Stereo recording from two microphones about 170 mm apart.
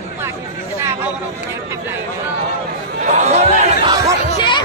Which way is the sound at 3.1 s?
45° right (ahead or behind).